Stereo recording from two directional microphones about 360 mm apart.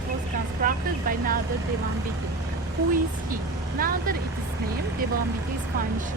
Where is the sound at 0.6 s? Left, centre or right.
Right.